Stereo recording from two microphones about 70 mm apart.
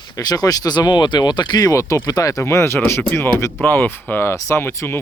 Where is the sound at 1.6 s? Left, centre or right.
Left.